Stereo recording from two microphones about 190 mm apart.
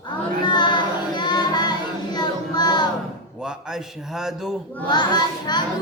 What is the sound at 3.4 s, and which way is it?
Mantra, 5° right (ahead or behind).